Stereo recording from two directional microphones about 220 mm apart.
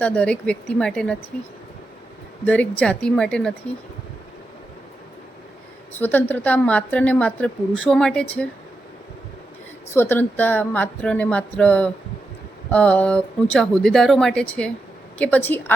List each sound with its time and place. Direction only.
0.0 s speech: 5° left (ahead or behind)
2.4 s speech: 5° left (ahead or behind)
6.0 s a woman's voice: 10° left (ahead or behind)
9.9 s a woman's voice: 10° left (ahead or behind)